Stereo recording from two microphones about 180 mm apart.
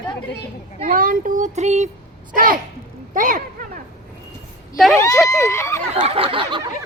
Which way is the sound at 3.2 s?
45° right (ahead or behind).